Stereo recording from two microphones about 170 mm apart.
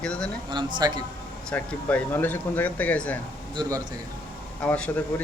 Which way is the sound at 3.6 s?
25° right (ahead or behind).